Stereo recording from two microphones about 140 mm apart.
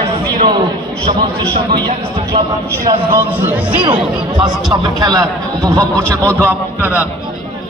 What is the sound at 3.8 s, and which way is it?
Speech, 30° right (ahead or behind).